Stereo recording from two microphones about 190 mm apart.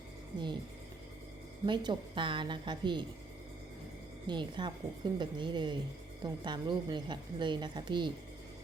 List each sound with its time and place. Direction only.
0.3 s speech: 25° right (ahead or behind)
1.6 s speech: 25° right (ahead or behind)
4.3 s speech: 25° right (ahead or behind)